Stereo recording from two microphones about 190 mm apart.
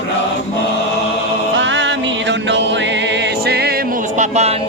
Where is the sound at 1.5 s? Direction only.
70° right (ahead or behind).